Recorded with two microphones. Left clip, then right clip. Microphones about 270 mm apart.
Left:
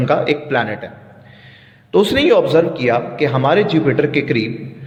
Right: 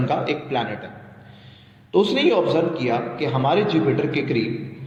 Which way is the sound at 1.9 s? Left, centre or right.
Left.